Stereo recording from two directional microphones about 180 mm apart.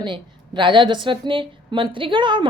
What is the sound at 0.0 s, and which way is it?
A woman's voice, 25° right (ahead or behind).